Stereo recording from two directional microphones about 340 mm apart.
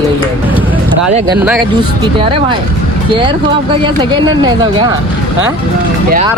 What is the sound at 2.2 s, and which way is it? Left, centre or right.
Speech, centre.